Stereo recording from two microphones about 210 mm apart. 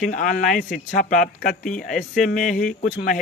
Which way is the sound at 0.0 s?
40° left (ahead or behind).